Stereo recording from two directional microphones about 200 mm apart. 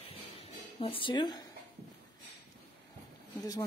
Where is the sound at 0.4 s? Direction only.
30° left (ahead or behind).